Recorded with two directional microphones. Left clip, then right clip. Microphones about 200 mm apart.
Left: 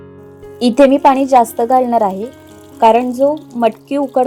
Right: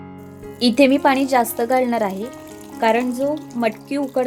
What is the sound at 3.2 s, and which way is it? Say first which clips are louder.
Speech: left 8 dB; 10° right (ahead or behind).